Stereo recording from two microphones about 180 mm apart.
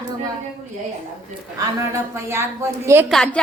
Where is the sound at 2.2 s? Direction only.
15° right (ahead or behind).